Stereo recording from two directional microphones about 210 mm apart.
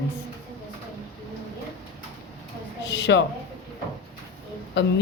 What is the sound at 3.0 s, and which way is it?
Speech, 60° left (ahead or behind).